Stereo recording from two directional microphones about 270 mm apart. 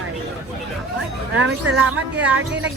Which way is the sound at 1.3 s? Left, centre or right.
Right.